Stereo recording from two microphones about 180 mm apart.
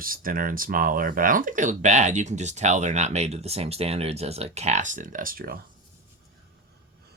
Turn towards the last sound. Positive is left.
turn(degrees=-55)  # may be behind; listen again after turning